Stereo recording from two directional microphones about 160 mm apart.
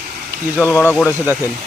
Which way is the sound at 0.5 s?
10° left (ahead or behind).